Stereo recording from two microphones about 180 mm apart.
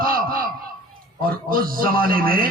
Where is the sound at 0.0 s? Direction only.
55° right (ahead or behind).